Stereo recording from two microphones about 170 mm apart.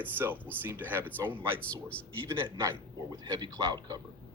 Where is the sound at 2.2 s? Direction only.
15° right (ahead or behind).